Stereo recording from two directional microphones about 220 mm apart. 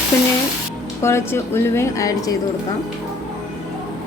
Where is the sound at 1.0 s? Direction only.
10° left (ahead or behind).